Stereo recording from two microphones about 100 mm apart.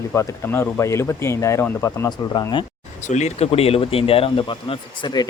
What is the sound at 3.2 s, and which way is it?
Speech, 85° left.